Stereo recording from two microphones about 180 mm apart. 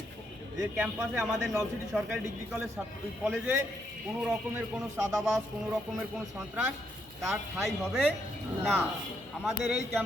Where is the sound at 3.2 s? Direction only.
10° right (ahead or behind).